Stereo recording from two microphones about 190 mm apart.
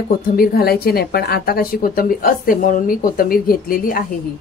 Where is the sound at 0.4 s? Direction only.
55° left (ahead or behind).